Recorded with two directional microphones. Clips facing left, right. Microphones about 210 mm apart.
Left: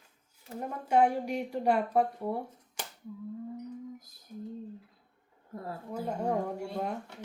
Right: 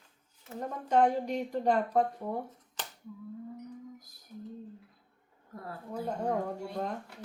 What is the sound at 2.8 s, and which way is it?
Cap gun, 10° left (ahead or behind).